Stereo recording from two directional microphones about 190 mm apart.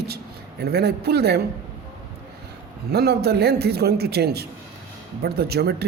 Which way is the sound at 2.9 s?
55° right (ahead or behind).